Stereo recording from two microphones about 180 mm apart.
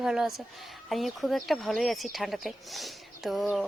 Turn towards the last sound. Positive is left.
turn(degrees=0)  # may be behind; listen again after turning